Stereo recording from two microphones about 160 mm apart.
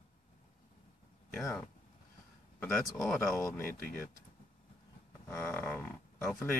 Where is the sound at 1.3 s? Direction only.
10° left (ahead or behind).